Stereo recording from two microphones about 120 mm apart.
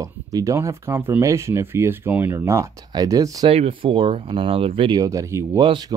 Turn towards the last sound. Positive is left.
turn(degrees=-40)  # may be behind; listen again after turning